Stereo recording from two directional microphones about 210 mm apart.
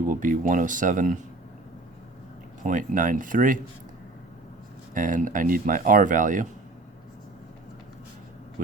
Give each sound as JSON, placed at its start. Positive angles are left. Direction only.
{"t": 0.1, "sound": "speech", "side_deg": -40}
{"t": 2.6, "sound": "speech", "side_deg": -40}
{"t": 4.9, "sound": "speech", "side_deg": -40}